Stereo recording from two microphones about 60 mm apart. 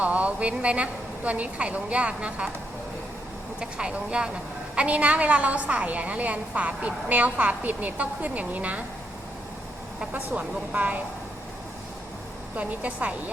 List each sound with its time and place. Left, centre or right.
0.0 s a woman's voice: right
3.6 s a woman's voice: centre
10.1 s a woman's voice: right
12.5 s a woman's voice: right